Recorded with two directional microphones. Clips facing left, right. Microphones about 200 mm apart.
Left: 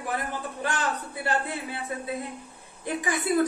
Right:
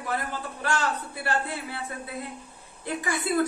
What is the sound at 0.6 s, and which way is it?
A man's voice, 20° left (ahead or behind).